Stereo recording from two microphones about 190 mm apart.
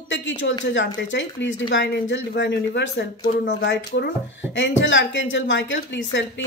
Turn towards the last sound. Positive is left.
turn(degrees=70)  # may be behind; listen again after turning